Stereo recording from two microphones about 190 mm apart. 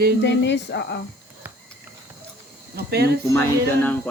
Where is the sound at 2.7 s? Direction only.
55° right (ahead or behind).